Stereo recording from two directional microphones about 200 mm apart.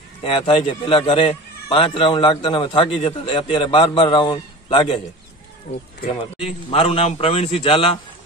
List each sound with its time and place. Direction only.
0.2 s a man's voice: 25° left (ahead or behind)
6.7 s a man's voice: 30° left (ahead or behind)